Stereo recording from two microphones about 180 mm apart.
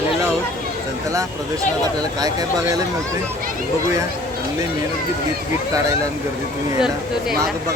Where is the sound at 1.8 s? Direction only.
20° right (ahead or behind).